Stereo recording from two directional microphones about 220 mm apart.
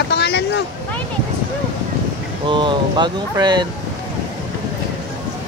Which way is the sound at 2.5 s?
20° right (ahead or behind).